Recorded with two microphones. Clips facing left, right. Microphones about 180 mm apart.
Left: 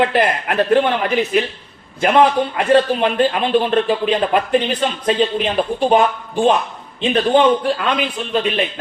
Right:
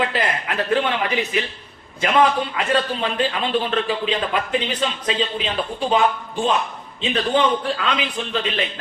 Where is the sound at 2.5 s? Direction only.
55° left (ahead or behind).